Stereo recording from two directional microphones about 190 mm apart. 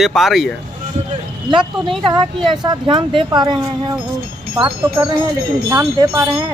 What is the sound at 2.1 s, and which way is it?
Speech, 25° right (ahead or behind).